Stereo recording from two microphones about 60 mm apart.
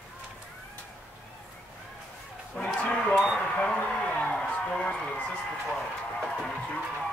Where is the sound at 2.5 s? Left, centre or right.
Centre.